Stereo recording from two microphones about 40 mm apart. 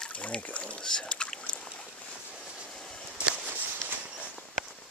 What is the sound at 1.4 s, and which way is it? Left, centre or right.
Boat, left.